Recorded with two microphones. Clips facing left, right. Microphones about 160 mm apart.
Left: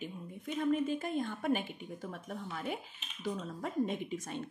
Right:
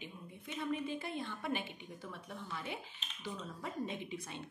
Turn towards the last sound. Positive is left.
turn(degrees=45)  # may be behind; listen again after turning